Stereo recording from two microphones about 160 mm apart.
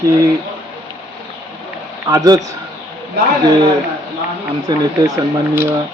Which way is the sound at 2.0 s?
20° right (ahead or behind).